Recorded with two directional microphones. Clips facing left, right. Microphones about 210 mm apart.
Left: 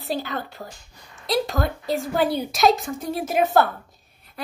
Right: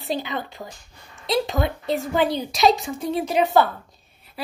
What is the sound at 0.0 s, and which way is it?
A woman's voice, centre (ahead or behind).